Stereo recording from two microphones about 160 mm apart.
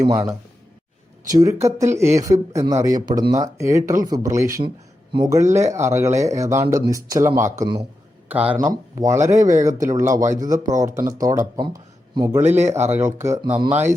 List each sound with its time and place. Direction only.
1.3 s speech: 20° right (ahead or behind)
8.5 s speech: 25° right (ahead or behind)